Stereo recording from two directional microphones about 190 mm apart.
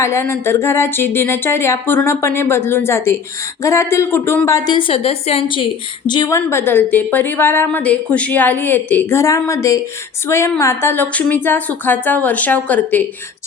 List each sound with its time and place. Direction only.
0.0 s speech: 15° left (ahead or behind)